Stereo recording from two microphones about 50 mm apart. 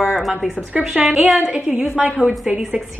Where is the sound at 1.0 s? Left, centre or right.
Right.